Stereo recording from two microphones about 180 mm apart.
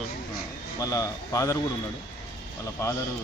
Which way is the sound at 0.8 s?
20° left (ahead or behind).